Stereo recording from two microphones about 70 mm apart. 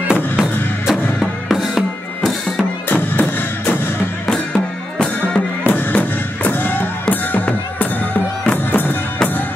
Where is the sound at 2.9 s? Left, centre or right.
Left.